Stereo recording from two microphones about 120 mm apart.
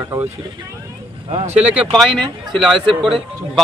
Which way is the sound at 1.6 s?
10° right (ahead or behind).